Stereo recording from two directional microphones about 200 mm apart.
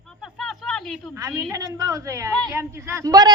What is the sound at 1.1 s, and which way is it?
A woman's voice, 15° right (ahead or behind).